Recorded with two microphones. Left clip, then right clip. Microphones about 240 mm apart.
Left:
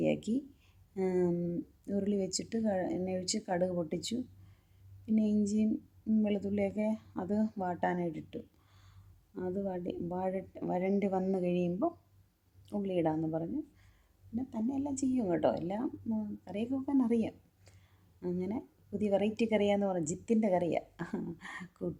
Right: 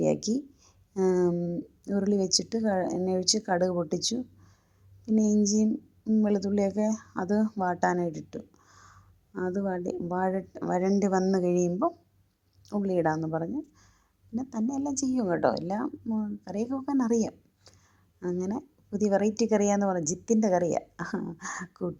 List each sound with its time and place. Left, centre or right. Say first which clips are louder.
0.0 s a woman's voice: right 5 dB; centre
5.3 s a woman's voice: right 7 dB; centre